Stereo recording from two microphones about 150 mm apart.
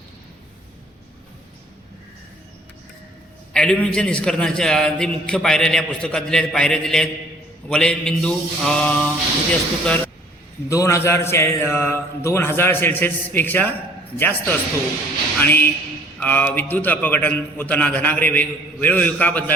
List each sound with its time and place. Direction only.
3.5 s a man's voice: 5° left (ahead or behind)
10.7 s a man's voice: 20° left (ahead or behind)